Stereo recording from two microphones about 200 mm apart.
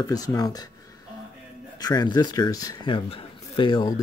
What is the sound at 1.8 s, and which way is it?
Speech, 20° left (ahead or behind).